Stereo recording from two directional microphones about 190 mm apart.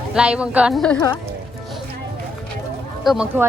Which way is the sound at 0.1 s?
5° right (ahead or behind).